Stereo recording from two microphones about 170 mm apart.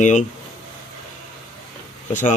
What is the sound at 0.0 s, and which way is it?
Speech, 45° left (ahead or behind).